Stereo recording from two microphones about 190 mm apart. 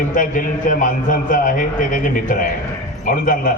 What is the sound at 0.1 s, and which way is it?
A man's voice, 45° left (ahead or behind).